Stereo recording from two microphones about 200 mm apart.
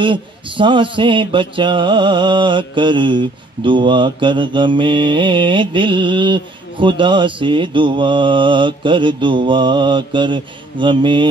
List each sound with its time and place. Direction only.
0.0 s mantra: 25° right (ahead or behind)